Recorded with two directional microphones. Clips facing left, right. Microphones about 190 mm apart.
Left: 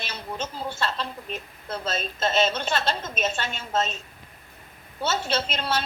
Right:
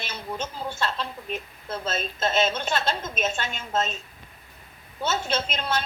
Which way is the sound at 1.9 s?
Centre (ahead or behind).